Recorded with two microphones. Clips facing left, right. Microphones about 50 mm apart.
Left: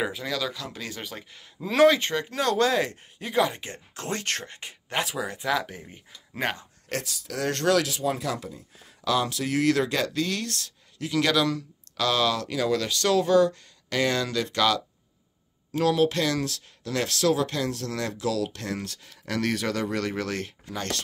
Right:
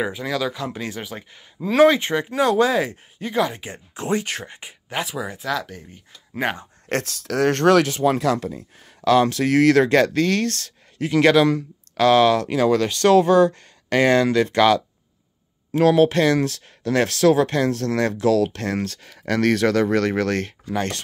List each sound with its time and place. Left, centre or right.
0.0 s speech: centre
0.6 s speech: right; by 3.6 s centre
3.6 s speech: centre
5.5 s speech: centre
6.4 s speech: centre
6.9 s speech: right
8.0 s speech: right
11.0 s speech: right
20.6 s speech: right